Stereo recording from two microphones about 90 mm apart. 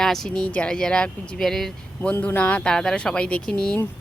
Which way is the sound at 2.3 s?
15° left (ahead or behind).